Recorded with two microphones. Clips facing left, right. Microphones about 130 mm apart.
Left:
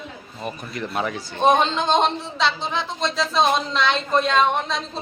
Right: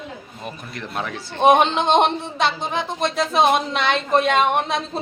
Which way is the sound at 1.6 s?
65° right (ahead or behind).